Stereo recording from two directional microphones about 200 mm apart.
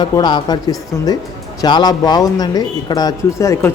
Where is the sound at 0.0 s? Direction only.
20° left (ahead or behind).